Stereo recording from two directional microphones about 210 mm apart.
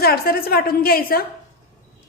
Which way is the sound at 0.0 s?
45° left (ahead or behind).